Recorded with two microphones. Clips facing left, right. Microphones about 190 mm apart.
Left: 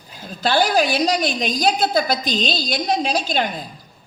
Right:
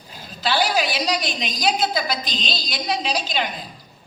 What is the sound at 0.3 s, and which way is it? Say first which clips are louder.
A woman's voice: left 3 dB; 45° left (ahead or behind).